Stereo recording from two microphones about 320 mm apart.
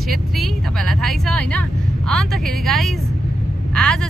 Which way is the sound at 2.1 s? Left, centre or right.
Centre.